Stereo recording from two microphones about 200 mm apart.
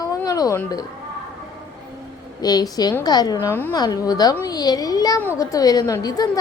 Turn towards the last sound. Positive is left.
turn(degrees=20)  # may be behind; listen again after turning